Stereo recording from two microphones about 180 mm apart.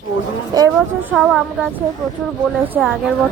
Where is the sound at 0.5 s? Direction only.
20° right (ahead or behind).